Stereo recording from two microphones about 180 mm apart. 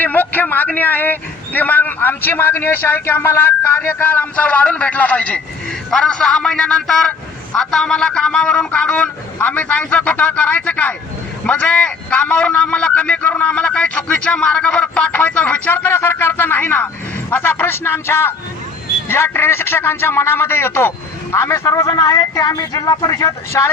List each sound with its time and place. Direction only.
0.0 s a man's voice: 10° left (ahead or behind)